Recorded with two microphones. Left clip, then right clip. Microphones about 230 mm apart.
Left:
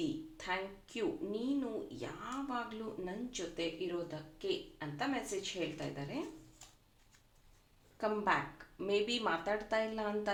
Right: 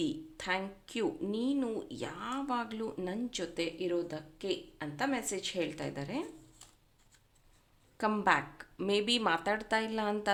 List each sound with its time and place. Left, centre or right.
0.3 s speech: right
7.9 s speech: right